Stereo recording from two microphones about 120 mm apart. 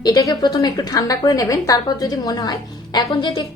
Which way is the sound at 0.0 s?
30° left (ahead or behind).